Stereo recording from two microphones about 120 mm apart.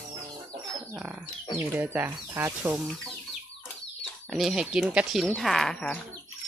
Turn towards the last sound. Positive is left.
turn(degrees=5)  # may be behind; listen again after turning